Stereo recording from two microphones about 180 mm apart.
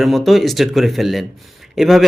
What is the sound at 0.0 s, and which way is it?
Speech, centre (ahead or behind).